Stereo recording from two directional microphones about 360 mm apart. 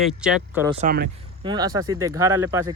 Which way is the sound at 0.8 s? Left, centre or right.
Right.